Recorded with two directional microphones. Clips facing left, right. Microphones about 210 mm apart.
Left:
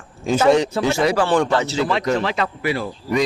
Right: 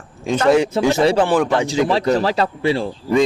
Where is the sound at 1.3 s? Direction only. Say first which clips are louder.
Right 1 dB; 10° right (ahead or behind).